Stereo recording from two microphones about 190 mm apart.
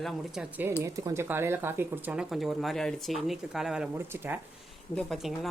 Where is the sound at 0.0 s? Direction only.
Centre (ahead or behind).